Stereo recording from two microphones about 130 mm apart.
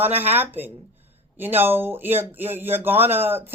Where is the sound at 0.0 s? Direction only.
15° right (ahead or behind).